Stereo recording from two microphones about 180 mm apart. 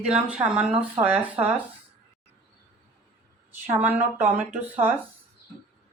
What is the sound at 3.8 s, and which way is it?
Speech, 10° right (ahead or behind).